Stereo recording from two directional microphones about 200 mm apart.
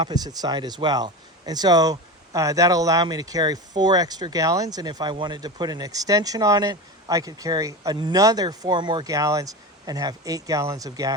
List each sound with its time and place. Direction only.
0.0 s speech: 20° right (ahead or behind)